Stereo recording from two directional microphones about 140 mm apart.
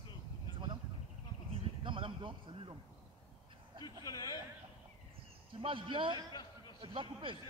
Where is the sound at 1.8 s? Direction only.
35° right (ahead or behind).